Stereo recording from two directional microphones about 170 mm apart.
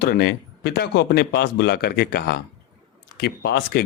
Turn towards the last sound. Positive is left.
turn(degrees=70)  # may be behind; listen again after turning